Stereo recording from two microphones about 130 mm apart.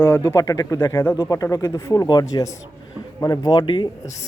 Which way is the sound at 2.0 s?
30° left (ahead or behind).